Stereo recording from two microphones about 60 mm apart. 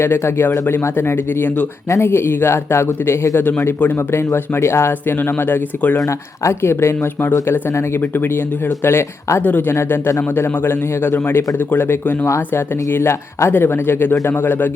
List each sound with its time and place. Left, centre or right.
0.0 s a man's voice: left
1.9 s a man's voice: left
6.1 s a man's voice: left
9.4 s a man's voice: left
9.7 s a man's voice: left